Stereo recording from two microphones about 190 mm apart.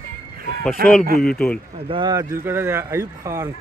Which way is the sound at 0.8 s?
55° right (ahead or behind).